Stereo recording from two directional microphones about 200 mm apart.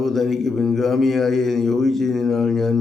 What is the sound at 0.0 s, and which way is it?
Mantra, centre (ahead or behind).